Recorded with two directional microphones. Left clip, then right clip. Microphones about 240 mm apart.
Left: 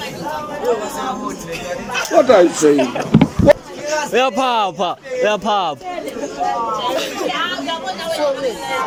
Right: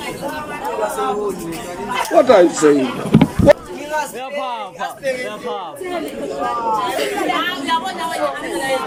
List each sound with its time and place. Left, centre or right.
2.1 s speech: centre
4.1 s speech: left